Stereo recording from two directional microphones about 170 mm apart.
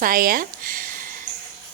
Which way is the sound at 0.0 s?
60° right (ahead or behind).